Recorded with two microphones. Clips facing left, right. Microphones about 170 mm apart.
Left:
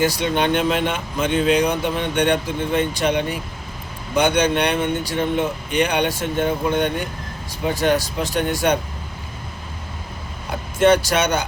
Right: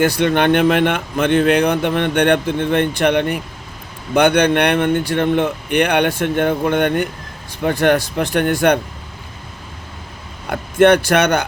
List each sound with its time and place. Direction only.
0.0 s speech: 60° right (ahead or behind)
10.5 s speech: 60° right (ahead or behind)